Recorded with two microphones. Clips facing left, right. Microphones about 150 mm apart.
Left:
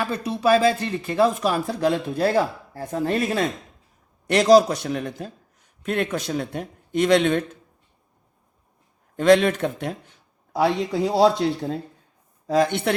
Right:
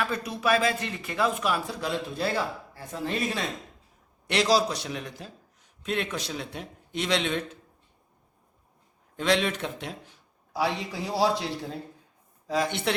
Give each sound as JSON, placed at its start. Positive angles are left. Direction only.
{"t": 0.0, "sound": "speech", "side_deg": 30}
{"t": 9.1, "sound": "speech", "side_deg": 50}
{"t": 12.5, "sound": "speech", "side_deg": 55}